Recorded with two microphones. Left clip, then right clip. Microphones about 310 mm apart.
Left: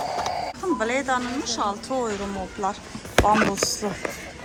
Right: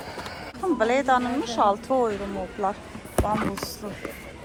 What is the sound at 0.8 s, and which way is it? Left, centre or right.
A woman's voice, centre.